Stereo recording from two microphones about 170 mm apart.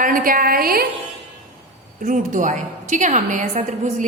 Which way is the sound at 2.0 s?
50° right (ahead or behind).